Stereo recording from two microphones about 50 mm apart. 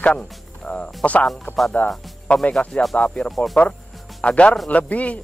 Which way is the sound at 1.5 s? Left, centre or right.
Left.